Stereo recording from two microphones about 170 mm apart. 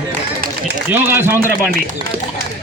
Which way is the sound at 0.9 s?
10° right (ahead or behind).